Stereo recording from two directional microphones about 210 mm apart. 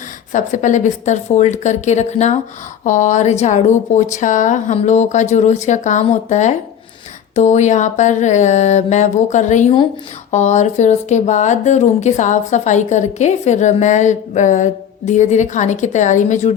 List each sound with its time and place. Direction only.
0.3 s speech: 35° left (ahead or behind)